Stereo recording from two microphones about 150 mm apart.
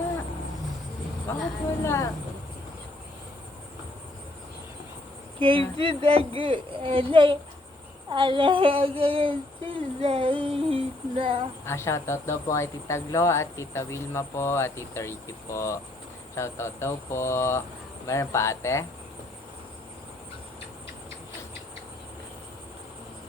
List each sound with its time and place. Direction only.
1.8 s speech: 15° left (ahead or behind)
5.4 s a sound: 35° right (ahead or behind)
11.6 s speech: 15° left (ahead or behind)